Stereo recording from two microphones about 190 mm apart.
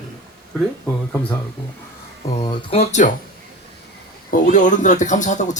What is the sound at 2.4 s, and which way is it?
Speech, 30° left (ahead or behind).